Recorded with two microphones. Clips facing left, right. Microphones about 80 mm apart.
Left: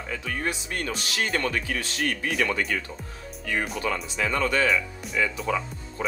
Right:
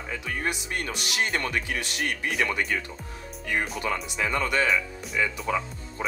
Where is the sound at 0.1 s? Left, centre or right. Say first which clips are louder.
Even; centre.